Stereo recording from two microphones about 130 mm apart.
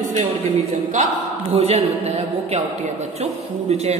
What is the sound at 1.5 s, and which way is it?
Speech, 50° right (ahead or behind).